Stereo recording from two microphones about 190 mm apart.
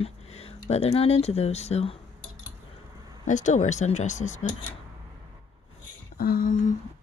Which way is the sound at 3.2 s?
40° left (ahead or behind).